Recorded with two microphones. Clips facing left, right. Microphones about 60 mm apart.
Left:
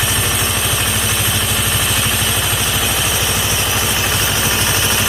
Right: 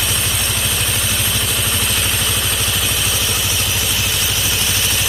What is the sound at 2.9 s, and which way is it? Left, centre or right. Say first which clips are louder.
Vehicle: left 3 dB; left.